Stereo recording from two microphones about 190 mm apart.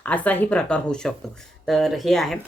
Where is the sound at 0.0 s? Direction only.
10° left (ahead or behind).